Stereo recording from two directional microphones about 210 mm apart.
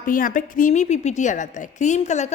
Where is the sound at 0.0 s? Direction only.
40° left (ahead or behind).